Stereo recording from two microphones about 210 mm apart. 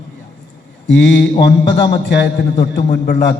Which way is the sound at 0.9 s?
55° left (ahead or behind).